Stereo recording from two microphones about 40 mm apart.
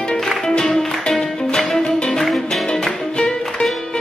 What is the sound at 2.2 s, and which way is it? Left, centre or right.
Music, centre.